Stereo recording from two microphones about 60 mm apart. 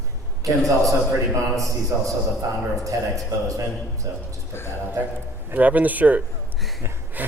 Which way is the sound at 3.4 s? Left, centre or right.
Right.